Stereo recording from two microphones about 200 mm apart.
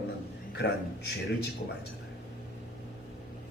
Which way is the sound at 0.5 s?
55° left (ahead or behind).